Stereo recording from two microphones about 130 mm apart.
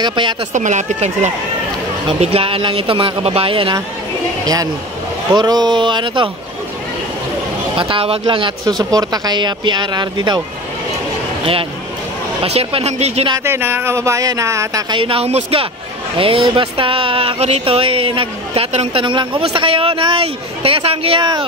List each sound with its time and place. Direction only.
0.0 s speech: 35° right (ahead or behind)
0.5 s speech: 75° right (ahead or behind)
2.1 s speech: 45° right (ahead or behind)
5.3 s speech: 35° right (ahead or behind)
7.7 s speech: 45° right (ahead or behind)
8.9 s speech: 30° right (ahead or behind)
12.4 s speech: 50° right (ahead or behind)
13.4 s speech: 20° right (ahead or behind)
15.0 s speech: 45° right (ahead or behind)
19.0 s speech: 40° right (ahead or behind)